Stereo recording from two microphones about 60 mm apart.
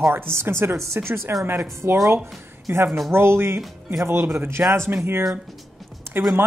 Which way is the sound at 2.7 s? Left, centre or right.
Right.